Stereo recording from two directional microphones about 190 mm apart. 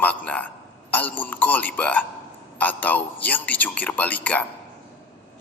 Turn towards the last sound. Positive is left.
turn(degrees=10)  # may be behind; listen again after turning